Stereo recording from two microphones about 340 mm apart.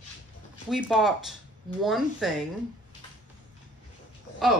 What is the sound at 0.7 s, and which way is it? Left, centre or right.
A woman's voice, centre.